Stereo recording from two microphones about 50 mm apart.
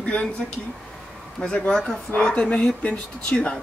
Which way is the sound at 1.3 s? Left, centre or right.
Centre.